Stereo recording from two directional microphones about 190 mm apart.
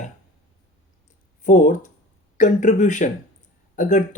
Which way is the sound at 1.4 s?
40° left (ahead or behind).